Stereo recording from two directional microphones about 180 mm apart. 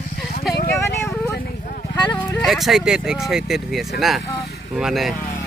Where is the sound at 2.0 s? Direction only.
25° left (ahead or behind).